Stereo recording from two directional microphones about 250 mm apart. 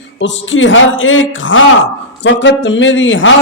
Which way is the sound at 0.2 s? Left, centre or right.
Left.